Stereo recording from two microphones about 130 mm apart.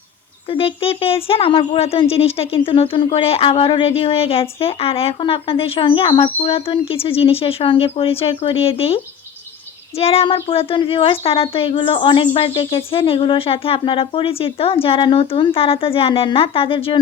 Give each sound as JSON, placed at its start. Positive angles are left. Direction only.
{"t": 0.5, "sound": "speech", "side_deg": 45}
{"t": 10.0, "sound": "speech", "side_deg": 50}